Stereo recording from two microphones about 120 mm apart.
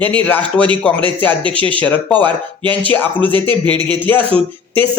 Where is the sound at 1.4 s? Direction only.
45° right (ahead or behind).